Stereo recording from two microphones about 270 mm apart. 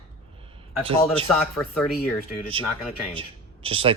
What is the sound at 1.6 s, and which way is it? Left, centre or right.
Speech, centre.